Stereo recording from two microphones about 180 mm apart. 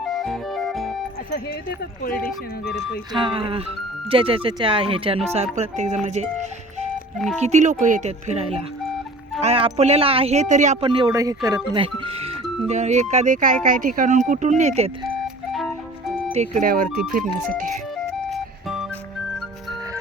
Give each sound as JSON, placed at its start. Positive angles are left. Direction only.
{"t": 0.0, "sound": "music", "side_deg": 0}
{"t": 2.6, "sound": "speech", "side_deg": 80}
{"t": 3.1, "sound": "speech", "side_deg": -30}
{"t": 7.3, "sound": "speech", "side_deg": -40}
{"t": 10.8, "sound": "speech", "side_deg": -25}
{"t": 16.3, "sound": "speech", "side_deg": -40}
{"t": 16.6, "sound": "speech", "side_deg": -55}
{"t": 17.9, "sound": "music", "side_deg": 0}